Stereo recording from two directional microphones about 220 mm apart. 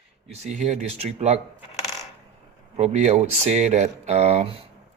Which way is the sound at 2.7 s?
30° right (ahead or behind).